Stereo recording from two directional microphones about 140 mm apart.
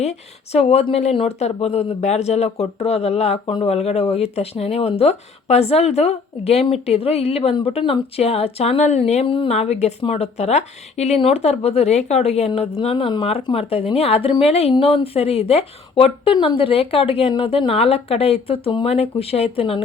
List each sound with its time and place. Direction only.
0.0 s a woman's voice: 50° left (ahead or behind)
9.2 s speech: 35° left (ahead or behind)
9.5 s a woman's voice: 50° left (ahead or behind)